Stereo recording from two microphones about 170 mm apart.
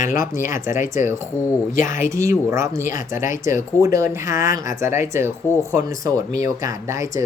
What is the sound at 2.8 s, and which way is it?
Speech, 50° left (ahead or behind).